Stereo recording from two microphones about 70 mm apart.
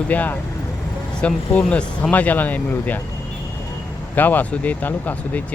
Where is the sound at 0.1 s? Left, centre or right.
Left.